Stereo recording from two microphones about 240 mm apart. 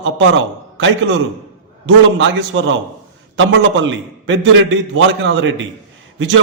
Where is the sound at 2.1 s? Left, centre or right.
Right.